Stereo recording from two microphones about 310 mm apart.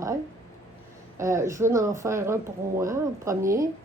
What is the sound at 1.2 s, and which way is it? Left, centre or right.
Speech, centre.